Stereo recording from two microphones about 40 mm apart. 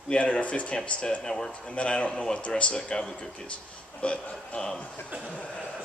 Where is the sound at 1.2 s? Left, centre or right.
Centre.